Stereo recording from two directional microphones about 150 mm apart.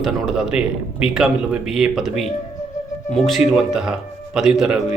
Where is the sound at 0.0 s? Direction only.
Centre (ahead or behind).